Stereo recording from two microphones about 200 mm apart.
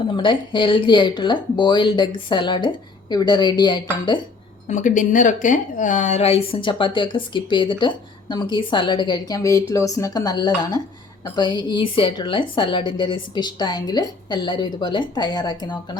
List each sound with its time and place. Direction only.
0.2 s speech: 25° left (ahead or behind)
4.7 s speech: 40° left (ahead or behind); by 16.0 s 20° left (ahead or behind)